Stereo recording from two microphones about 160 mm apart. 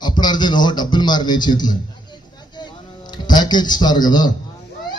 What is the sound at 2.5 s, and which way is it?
Music, 25° left (ahead or behind).